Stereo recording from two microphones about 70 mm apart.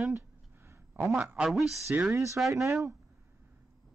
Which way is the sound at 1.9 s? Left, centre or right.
Right.